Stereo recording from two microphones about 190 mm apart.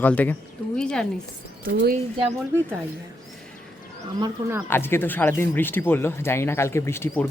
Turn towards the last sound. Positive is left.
turn(degrees=15)  # may be behind; listen again after turning